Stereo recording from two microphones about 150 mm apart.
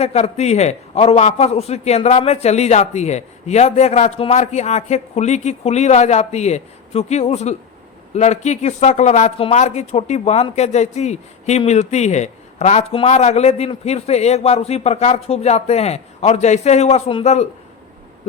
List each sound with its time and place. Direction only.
0.0 s speech: 45° left (ahead or behind)